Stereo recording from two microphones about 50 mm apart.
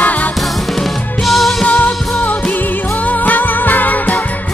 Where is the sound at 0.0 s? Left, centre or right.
Left.